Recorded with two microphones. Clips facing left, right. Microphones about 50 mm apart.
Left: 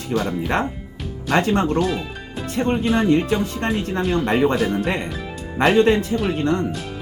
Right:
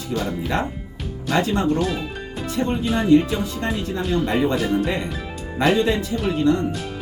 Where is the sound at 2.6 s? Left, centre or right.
Left.